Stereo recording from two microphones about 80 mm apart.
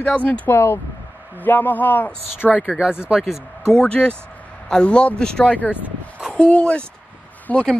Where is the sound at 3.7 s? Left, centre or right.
Centre.